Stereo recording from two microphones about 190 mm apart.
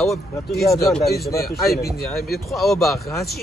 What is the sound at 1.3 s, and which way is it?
Speech, 55° left (ahead or behind).